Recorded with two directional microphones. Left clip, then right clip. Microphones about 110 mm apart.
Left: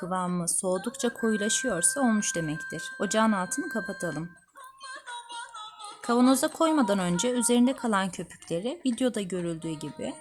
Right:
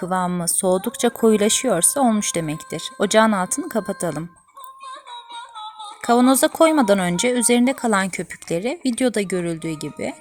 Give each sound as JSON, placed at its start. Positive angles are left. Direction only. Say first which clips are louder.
{"t": 0.0, "sound": "speech", "louder": "right 8 dB", "side_deg": -40}
{"t": 6.0, "sound": "speech", "louder": "right 8 dB", "side_deg": -40}